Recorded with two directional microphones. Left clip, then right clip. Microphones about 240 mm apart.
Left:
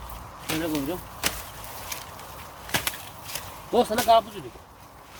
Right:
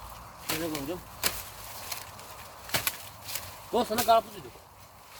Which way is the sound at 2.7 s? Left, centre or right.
Right.